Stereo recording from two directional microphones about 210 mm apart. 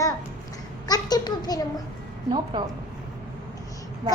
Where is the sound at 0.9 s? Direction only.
20° left (ahead or behind).